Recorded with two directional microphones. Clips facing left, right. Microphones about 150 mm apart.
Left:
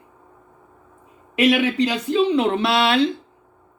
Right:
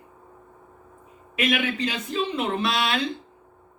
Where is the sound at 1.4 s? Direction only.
80° left.